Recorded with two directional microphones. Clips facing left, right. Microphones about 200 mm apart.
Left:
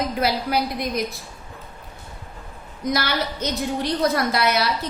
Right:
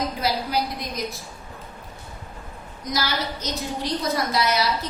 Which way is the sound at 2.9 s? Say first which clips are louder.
Left 3 dB; 60° left (ahead or behind).